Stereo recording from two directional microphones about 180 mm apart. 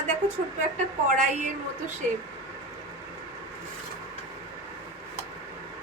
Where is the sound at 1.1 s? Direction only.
45° right (ahead or behind).